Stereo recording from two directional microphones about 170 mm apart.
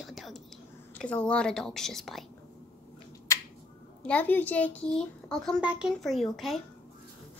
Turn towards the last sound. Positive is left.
turn(degrees=0)  # may be behind; listen again after turning